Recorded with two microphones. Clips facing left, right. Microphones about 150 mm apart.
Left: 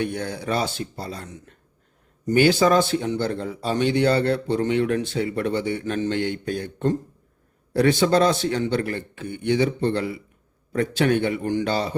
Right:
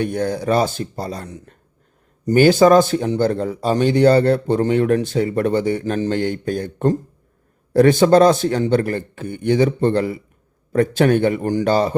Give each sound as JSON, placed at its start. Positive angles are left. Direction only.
{"t": 0.0, "sound": "speech", "side_deg": -45}